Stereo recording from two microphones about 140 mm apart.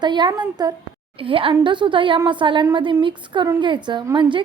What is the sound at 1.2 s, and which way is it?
A woman's voice, 40° right (ahead or behind).